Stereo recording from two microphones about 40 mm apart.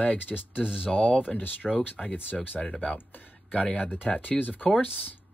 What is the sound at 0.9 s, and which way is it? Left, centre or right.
Speech, left.